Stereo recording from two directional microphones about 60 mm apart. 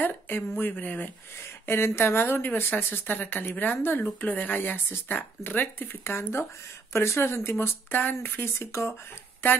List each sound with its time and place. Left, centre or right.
0.0 s speech: left
1.7 s speech: left